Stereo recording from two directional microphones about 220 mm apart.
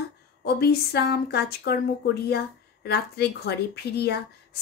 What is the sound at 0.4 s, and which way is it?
A woman's voice, 45° left (ahead or behind).